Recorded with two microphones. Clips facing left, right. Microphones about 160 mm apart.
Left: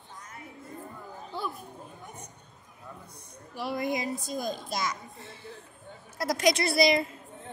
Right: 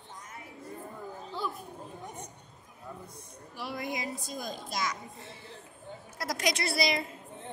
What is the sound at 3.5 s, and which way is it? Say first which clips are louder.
A woman's voice: left 6 dB; 30° left (ahead or behind).